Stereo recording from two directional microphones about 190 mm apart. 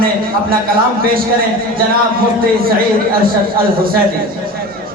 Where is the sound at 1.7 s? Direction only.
50° right (ahead or behind).